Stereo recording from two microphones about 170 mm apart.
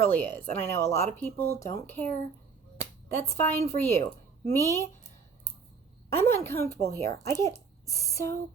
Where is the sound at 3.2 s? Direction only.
15° left (ahead or behind).